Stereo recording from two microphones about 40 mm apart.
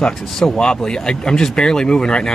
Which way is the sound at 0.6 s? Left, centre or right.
Centre.